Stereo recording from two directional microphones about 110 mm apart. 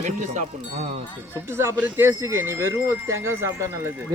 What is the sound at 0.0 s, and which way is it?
Speech, 90° right.